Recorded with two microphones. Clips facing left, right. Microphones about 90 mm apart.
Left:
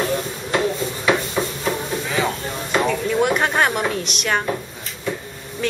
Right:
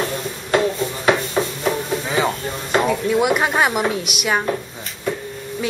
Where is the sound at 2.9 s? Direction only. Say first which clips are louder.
Right 1 dB; 10° right (ahead or behind).